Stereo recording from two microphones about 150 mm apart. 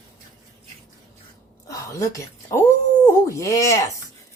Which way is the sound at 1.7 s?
20° left (ahead or behind).